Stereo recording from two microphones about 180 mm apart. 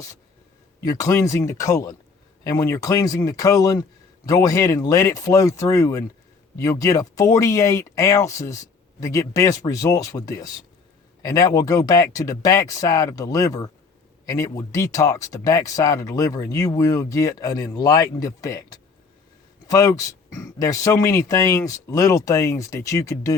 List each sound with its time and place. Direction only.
0.8 s speech: 20° left (ahead or behind)